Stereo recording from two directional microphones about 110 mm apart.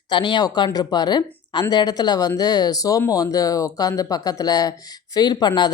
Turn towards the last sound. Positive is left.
turn(degrees=45)  # may be behind; listen again after turning